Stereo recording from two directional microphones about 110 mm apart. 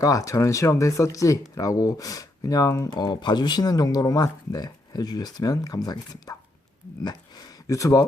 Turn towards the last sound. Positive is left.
turn(degrees=30)  # may be behind; listen again after turning